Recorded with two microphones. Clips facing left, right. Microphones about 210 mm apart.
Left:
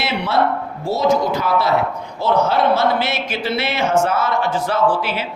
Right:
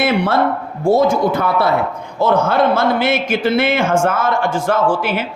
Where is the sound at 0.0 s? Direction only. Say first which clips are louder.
Right 7 dB; 50° right (ahead or behind).